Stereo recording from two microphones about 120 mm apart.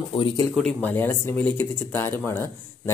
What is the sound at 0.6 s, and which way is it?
Speech, 10° left (ahead or behind).